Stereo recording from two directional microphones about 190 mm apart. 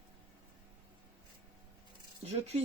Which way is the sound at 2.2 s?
35° right (ahead or behind).